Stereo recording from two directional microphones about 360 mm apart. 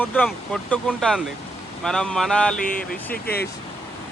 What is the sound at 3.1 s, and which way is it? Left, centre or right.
Speech, left.